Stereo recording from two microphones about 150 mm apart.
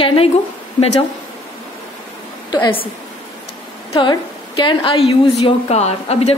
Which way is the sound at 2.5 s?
35° left (ahead or behind).